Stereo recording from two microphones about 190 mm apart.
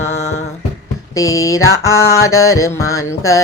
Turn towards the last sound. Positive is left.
turn(degrees=15)  # may be behind; listen again after turning